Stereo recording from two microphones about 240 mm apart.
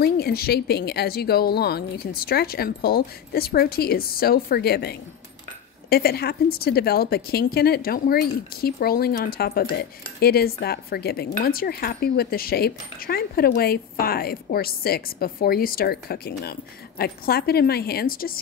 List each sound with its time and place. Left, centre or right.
0.0 s a woman's voice: left